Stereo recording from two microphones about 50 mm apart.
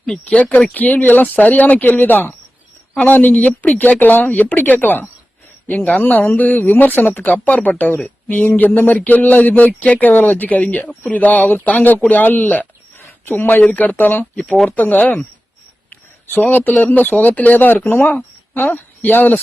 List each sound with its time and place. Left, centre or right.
0.3 s speech: left
14.4 s speech: centre
14.8 s speech: left
16.3 s speech: left